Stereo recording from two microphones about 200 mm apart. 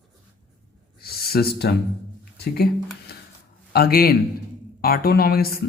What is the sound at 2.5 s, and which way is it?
Speech, 50° left (ahead or behind).